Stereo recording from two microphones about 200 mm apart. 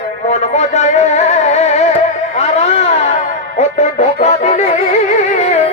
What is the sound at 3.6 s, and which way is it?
Music, 35° left (ahead or behind).